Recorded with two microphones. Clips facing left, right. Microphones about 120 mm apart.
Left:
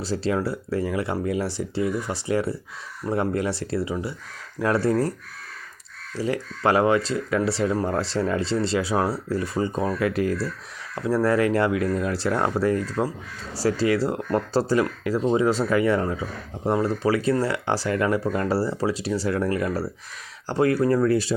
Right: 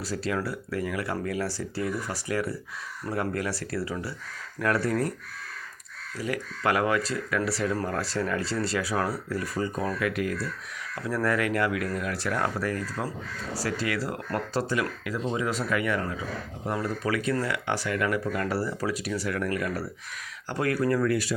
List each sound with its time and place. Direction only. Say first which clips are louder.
0.0 s speech: left 5 dB; 25° left (ahead or behind)
6.1 s speech: left 5 dB; 30° left (ahead or behind)